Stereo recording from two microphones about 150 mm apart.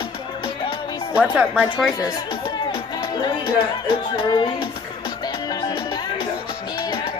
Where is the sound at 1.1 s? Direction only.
10° right (ahead or behind).